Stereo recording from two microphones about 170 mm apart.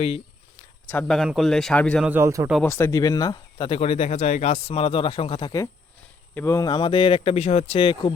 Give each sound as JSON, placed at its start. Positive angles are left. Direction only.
{"t": 0.9, "sound": "speech", "side_deg": 5}
{"t": 2.0, "sound": "a man's voice", "side_deg": -15}
{"t": 2.6, "sound": "speech", "side_deg": 15}